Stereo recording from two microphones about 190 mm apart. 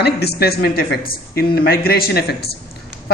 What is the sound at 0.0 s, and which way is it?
A man's voice, 60° left (ahead or behind).